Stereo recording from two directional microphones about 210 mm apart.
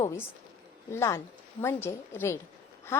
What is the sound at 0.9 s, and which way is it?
Speech, 15° left (ahead or behind).